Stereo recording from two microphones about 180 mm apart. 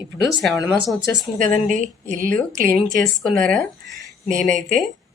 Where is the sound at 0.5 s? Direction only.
20° left (ahead or behind).